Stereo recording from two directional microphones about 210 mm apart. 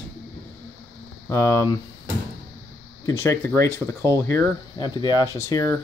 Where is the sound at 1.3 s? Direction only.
15° left (ahead or behind).